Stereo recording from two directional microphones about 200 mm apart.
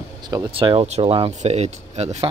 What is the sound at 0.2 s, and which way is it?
Speech, 20° right (ahead or behind).